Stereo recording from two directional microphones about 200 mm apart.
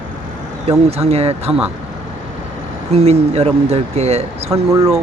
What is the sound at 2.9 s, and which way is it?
Speech, 30° right (ahead or behind).